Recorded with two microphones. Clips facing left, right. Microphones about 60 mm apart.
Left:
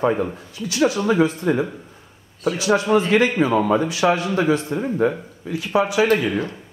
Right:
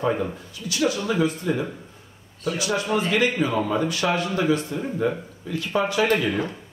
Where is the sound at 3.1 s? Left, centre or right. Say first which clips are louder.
Left 5 dB; left.